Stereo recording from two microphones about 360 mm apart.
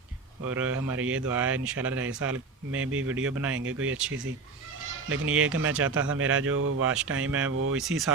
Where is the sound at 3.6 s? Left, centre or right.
Right.